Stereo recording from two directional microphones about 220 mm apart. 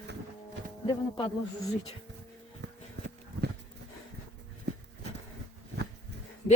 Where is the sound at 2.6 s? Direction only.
50° right (ahead or behind).